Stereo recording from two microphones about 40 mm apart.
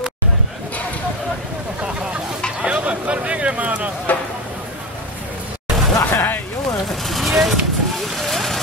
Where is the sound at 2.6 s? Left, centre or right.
Right.